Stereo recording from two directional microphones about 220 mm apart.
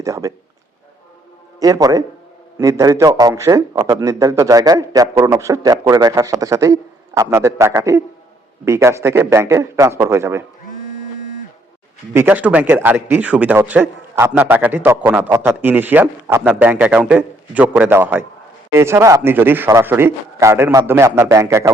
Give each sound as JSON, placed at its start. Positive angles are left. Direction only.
{"t": 0.0, "sound": "a man's voice", "side_deg": -15}
{"t": 1.5, "sound": "speech", "side_deg": -15}
{"t": 12.1, "sound": "speech", "side_deg": -10}